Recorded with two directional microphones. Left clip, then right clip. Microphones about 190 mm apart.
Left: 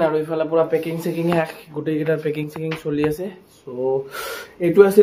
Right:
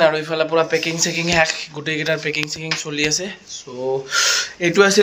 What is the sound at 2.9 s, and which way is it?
Speech, 30° left (ahead or behind).